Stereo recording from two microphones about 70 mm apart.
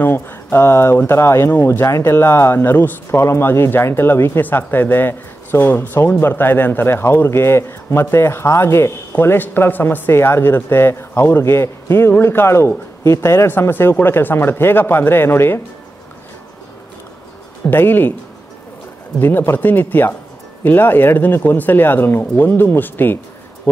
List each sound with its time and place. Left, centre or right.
0.0 s speech: left
2.0 s speech: left
3.2 s speech: left
17.6 s speech: left
19.1 s speech: left